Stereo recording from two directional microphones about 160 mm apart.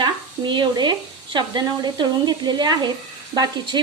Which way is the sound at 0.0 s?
30° right (ahead or behind).